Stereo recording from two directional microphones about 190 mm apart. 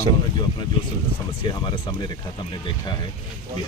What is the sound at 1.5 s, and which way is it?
Speech, 25° left (ahead or behind).